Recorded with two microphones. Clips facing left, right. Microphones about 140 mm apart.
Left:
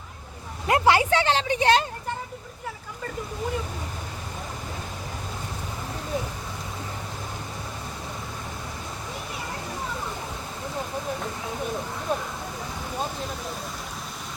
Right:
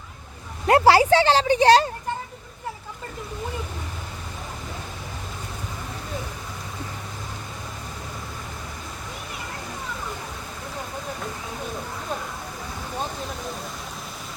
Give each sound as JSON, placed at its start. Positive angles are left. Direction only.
{"t": 0.7, "sound": "speech", "side_deg": -35}